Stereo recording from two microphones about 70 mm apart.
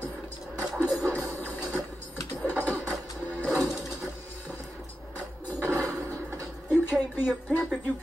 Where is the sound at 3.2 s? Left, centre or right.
Left.